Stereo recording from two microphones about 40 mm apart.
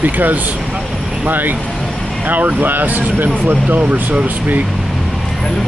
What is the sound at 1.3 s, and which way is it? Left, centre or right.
Speech, right.